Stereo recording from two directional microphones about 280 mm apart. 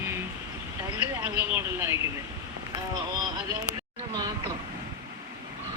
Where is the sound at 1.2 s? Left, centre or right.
Centre.